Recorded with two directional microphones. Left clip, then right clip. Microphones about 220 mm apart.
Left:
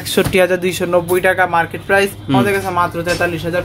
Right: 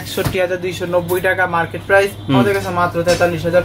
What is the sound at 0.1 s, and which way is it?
Speech, 50° left (ahead or behind).